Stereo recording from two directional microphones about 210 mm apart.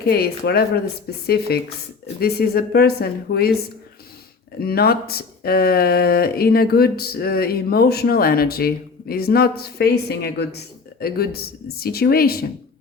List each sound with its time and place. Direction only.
0.0 s speech: 45° left (ahead or behind)
4.6 s speech: 45° left (ahead or behind)